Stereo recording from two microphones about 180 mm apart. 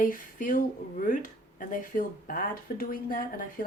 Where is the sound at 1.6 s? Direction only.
50° left (ahead or behind).